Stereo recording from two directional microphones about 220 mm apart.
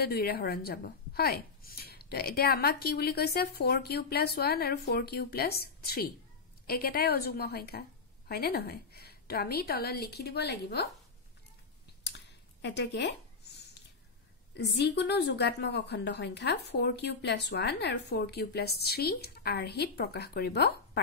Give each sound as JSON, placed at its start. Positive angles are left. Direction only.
{"t": 0.0, "sound": "a woman's voice", "side_deg": 45}
{"t": 12.6, "sound": "a woman's voice", "side_deg": 50}
{"t": 14.5, "sound": "a woman's voice", "side_deg": 50}